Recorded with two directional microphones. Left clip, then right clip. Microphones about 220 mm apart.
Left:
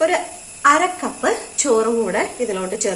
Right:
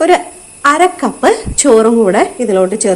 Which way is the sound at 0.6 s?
50° right (ahead or behind).